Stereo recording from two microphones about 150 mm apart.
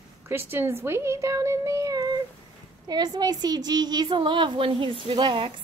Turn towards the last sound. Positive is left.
turn(degrees=-30)  # may be behind; listen again after turning